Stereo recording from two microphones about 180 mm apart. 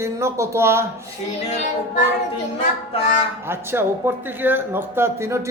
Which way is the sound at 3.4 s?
15° right (ahead or behind).